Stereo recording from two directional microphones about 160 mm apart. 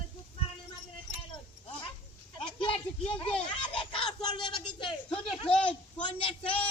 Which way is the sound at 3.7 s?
35° left (ahead or behind).